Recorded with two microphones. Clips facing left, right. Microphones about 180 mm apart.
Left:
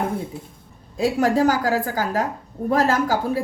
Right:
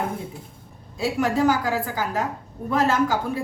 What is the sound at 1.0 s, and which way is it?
A woman's voice, 40° left (ahead or behind).